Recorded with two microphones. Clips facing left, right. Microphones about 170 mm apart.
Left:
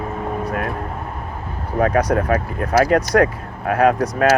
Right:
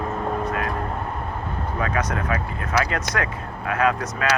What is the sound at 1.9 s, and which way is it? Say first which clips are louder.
Speech: left 7 dB; 35° left (ahead or behind).